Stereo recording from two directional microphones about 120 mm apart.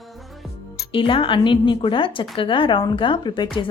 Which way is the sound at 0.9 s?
45° left (ahead or behind).